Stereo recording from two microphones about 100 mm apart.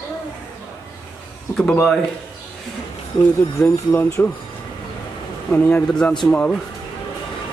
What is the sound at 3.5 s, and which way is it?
Speech, 20° left (ahead or behind).